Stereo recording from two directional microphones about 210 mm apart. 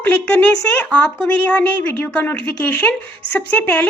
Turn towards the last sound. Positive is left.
turn(degrees=10)  # may be behind; listen again after turning